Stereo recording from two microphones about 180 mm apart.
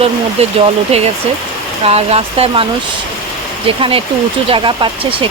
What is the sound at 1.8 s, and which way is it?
Speech, 35° right (ahead or behind).